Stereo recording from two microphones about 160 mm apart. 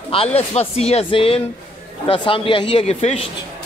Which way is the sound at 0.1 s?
35° left (ahead or behind).